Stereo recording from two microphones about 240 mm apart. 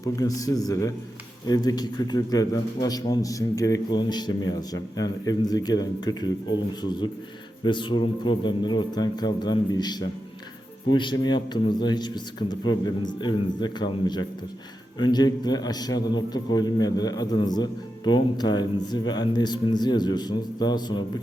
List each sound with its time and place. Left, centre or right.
0.2 s a man's voice: centre
7.6 s a man's voice: centre